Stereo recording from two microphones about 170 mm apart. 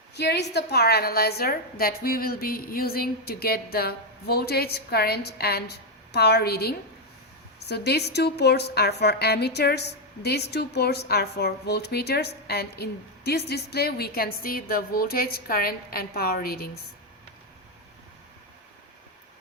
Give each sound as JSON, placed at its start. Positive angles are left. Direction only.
{"t": 0.1, "sound": "a woman's voice", "side_deg": 80}